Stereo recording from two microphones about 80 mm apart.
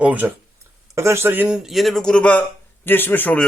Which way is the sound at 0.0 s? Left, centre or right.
Right.